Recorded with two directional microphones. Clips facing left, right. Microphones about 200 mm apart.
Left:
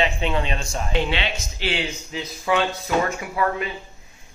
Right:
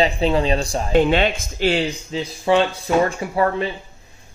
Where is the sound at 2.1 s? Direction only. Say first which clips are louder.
Right 5 dB; 30° right (ahead or behind).